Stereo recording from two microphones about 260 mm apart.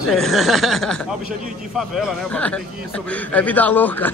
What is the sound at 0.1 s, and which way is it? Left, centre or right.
Speech, centre.